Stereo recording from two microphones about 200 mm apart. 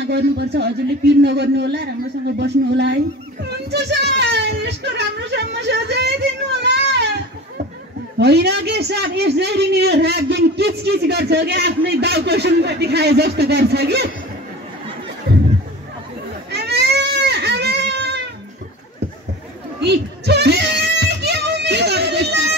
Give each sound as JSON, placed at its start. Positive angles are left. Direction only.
{"t": 0.0, "sound": "a man's voice", "side_deg": -55}
{"t": 8.2, "sound": "a man's voice", "side_deg": -55}
{"t": 16.4, "sound": "goat", "side_deg": -55}
{"t": 19.8, "sound": "a sound", "side_deg": -55}